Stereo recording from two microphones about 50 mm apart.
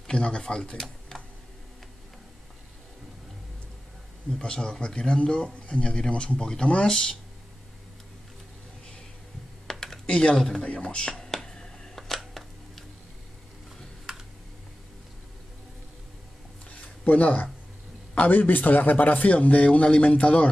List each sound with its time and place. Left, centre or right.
0.0 s speech: centre
4.4 s speech: centre
9.7 s typing: centre
10.3 s speech: centre
10.9 s speech: left
11.1 s a sound: centre
14.1 s computer keyboard: centre
16.7 s a sound: left
18.1 s a man's voice: left